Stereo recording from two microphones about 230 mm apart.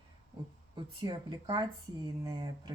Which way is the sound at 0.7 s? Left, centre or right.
Centre.